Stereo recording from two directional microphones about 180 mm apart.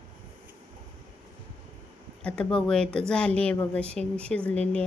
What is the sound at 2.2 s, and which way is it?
A woman's voice, 5° left (ahead or behind).